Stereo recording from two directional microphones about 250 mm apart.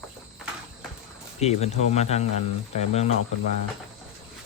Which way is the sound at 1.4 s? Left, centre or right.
Left.